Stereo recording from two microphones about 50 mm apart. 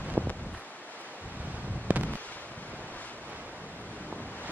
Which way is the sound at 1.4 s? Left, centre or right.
Right.